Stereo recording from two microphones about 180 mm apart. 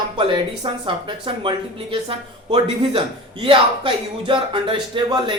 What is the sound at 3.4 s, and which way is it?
A man's voice, 30° right (ahead or behind).